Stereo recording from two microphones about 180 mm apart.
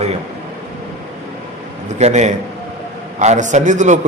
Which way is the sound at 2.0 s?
40° right (ahead or behind).